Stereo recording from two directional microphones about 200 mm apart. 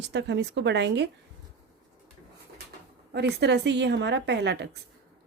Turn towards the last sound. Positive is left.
turn(degrees=-60)  # may be behind; listen again after turning